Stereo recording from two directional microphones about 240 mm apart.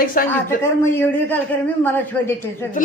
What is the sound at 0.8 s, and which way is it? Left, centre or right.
A man's voice, centre.